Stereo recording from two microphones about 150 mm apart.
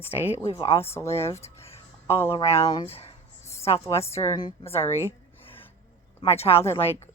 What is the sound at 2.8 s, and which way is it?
Speech, 40° left (ahead or behind).